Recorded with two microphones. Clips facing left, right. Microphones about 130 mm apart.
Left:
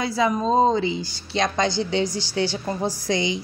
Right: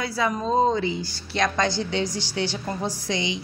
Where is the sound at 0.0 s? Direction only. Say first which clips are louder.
Left 4 dB; 20° left (ahead or behind).